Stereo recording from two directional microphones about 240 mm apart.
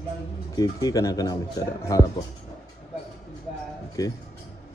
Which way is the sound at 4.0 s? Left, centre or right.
Centre.